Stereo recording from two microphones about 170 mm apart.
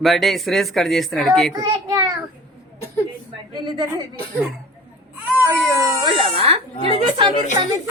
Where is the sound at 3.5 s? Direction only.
25° right (ahead or behind).